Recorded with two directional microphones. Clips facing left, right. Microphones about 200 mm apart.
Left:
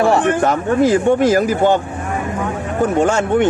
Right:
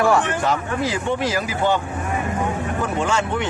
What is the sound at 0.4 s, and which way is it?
Speech, 50° left (ahead or behind).